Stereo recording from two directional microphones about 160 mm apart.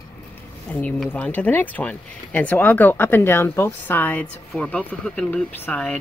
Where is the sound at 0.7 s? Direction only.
10° left (ahead or behind).